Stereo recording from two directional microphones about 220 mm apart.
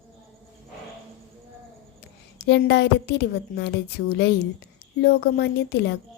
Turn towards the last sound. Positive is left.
turn(degrees=50)  # may be behind; listen again after turning